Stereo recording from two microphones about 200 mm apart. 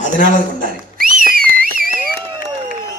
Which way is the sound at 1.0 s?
45° right (ahead or behind).